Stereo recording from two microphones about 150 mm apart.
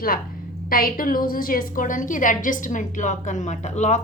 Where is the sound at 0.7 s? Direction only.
70° left (ahead or behind).